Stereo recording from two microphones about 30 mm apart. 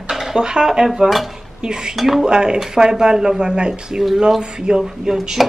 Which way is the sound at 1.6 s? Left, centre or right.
Right.